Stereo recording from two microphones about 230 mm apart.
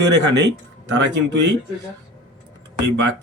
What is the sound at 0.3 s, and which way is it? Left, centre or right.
Speech, right.